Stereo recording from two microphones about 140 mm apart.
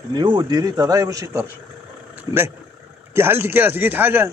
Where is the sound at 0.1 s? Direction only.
30° right (ahead or behind).